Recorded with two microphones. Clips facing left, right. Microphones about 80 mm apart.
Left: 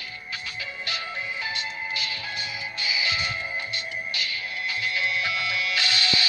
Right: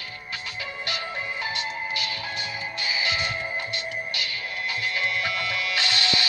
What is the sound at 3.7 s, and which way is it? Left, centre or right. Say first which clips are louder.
Music: right 1 dB; right.